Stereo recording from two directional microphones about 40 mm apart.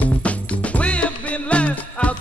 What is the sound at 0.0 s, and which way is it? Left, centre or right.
Music, left.